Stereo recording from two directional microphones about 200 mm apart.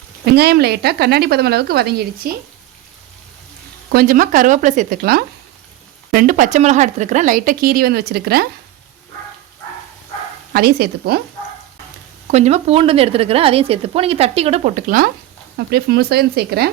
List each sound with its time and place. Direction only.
0.3 s a woman's voice: 55° right (ahead or behind)
3.9 s a woman's voice: 45° right (ahead or behind)
10.5 s a woman's voice: 50° right (ahead or behind)
12.3 s a woman's voice: 35° right (ahead or behind); by 16.7 s 50° right (ahead or behind)